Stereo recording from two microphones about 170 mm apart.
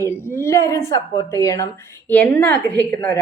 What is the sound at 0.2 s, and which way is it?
Speech, 15° left (ahead or behind).